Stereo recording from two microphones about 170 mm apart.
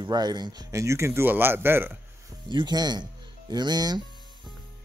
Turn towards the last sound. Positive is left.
turn(degrees=-25)  # may be behind; listen again after turning